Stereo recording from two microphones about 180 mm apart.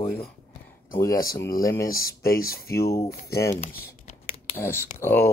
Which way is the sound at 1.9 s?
55° left (ahead or behind).